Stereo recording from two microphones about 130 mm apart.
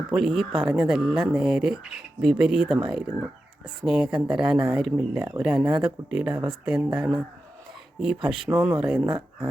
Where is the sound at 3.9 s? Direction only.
5° right (ahead or behind).